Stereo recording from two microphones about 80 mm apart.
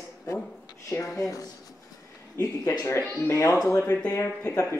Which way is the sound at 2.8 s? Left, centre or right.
Left.